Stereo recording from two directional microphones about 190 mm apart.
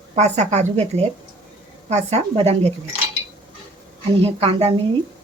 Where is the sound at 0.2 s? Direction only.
35° right (ahead or behind).